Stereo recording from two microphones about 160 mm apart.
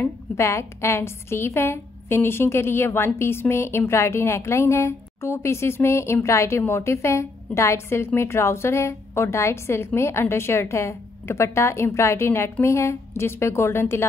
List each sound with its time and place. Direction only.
0.0 s a woman's voice: 15° left (ahead or behind)